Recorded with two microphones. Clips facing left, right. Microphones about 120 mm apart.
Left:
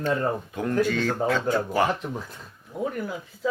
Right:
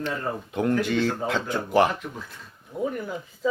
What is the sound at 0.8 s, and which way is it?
Speech, 20° right (ahead or behind).